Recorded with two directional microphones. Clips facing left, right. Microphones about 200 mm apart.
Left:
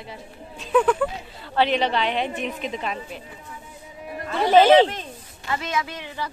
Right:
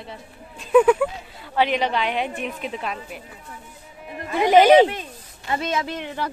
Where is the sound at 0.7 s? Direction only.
5° right (ahead or behind).